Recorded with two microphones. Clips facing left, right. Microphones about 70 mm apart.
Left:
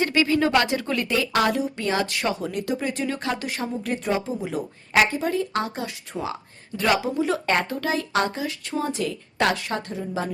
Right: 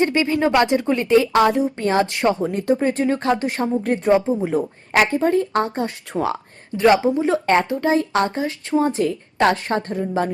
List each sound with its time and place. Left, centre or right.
0.0 s speech: right
6.1 s speech: right
6.7 s speech: right